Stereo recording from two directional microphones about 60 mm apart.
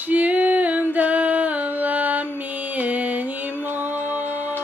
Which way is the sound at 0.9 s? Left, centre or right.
Right.